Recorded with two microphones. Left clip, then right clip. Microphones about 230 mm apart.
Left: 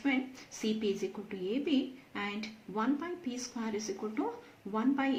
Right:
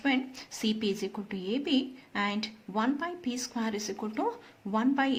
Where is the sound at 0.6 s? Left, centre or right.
Right.